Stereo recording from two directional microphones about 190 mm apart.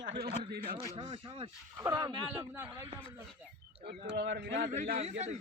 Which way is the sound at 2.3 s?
10° right (ahead or behind).